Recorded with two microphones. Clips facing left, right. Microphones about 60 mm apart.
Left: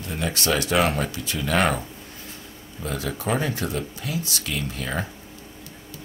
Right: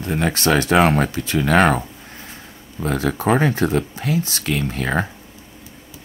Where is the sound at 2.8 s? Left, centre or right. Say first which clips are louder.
Right 8 dB; right.